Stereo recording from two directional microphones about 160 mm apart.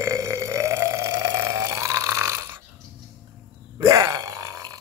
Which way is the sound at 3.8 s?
20° right (ahead or behind).